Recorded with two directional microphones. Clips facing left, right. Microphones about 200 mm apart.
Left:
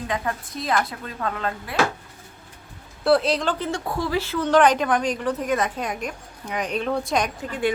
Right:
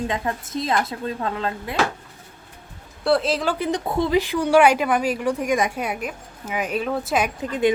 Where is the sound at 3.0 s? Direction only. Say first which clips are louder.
Left 1 dB; centre (ahead or behind).